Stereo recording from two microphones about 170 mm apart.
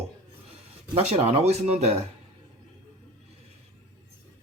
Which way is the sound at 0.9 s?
35° right (ahead or behind).